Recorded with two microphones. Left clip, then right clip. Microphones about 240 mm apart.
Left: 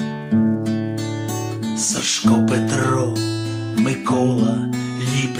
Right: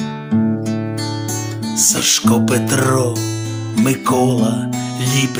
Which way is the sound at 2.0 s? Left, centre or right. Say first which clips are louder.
Even; right.